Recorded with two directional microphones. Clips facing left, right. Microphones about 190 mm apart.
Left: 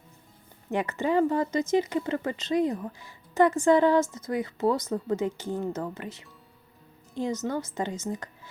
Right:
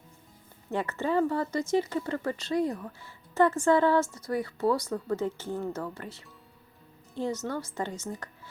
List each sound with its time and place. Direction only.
0.7 s speech: 15° left (ahead or behind)